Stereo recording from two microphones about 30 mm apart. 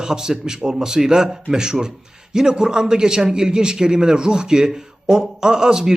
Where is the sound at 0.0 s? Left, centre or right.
Right.